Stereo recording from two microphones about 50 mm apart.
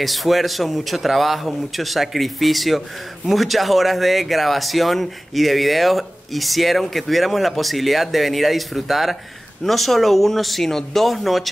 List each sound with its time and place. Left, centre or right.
0.0 s speech: centre